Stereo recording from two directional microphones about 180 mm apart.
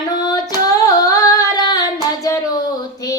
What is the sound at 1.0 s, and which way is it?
Singing, 20° left (ahead or behind).